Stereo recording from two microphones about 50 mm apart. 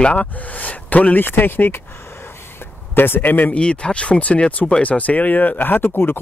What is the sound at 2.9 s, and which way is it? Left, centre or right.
Speech, left.